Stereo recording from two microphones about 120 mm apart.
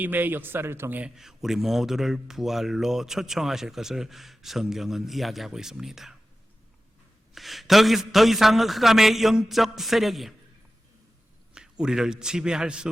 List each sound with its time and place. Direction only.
0.0 s a man's voice: 15° right (ahead or behind)
1.1 s speech: 5° right (ahead or behind)
7.3 s speech: centre (ahead or behind)
11.5 s a man's voice: 5° right (ahead or behind)